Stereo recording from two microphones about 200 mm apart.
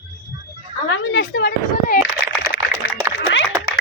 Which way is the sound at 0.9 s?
65° left (ahead or behind).